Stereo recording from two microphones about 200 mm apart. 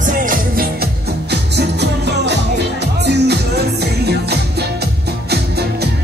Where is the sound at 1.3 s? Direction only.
55° right (ahead or behind).